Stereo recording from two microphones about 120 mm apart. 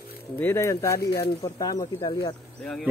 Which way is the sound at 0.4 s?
20° left (ahead or behind).